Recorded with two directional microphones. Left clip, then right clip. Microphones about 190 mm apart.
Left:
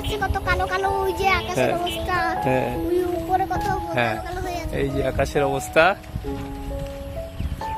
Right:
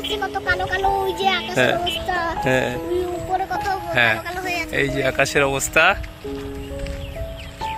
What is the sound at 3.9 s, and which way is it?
Speech, 5° left (ahead or behind).